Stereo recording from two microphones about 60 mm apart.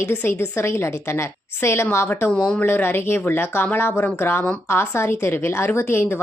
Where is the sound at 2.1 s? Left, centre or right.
Left.